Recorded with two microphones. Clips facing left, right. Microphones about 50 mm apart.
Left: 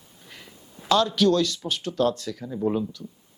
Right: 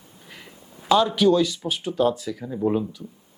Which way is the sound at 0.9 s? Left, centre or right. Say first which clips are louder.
Right 2 dB; centre.